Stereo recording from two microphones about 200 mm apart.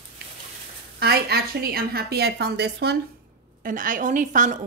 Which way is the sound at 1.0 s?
50° right (ahead or behind).